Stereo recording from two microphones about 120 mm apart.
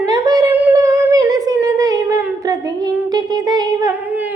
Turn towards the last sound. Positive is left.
turn(degrees=-15)  # may be behind; listen again after turning